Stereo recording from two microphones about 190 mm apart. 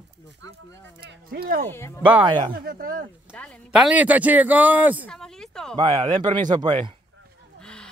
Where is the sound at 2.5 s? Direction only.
50° right (ahead or behind).